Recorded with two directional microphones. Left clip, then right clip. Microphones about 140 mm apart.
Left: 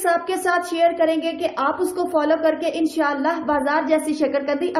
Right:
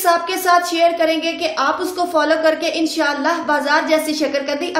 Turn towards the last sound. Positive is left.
turn(degrees=30)  # may be behind; listen again after turning